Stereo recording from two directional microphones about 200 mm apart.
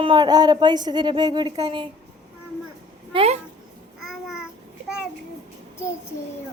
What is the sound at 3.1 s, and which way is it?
Speech, 30° right (ahead or behind).